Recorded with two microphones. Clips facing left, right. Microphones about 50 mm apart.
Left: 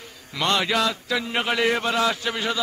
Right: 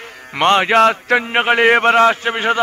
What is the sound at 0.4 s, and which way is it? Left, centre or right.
A man's voice, right.